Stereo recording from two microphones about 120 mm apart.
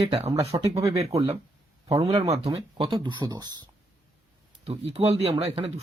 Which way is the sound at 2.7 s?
45° right (ahead or behind).